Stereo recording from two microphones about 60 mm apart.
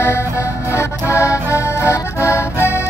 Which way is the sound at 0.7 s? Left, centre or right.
Left.